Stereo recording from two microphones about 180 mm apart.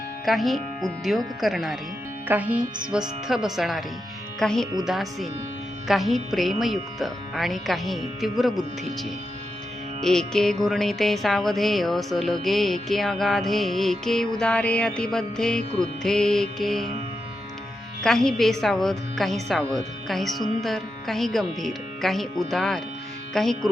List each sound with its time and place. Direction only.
0.3 s music: centre (ahead or behind)
10.0 s music: 5° left (ahead or behind)
18.0 s music: 5° left (ahead or behind)